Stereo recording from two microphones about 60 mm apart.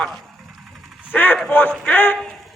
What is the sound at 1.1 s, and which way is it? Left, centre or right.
A man's voice, left.